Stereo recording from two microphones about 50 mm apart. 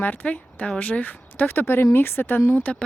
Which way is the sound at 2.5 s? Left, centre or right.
Left.